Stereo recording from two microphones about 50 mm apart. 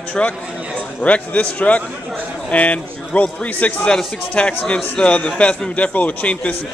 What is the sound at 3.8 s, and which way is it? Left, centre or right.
A man's voice, centre.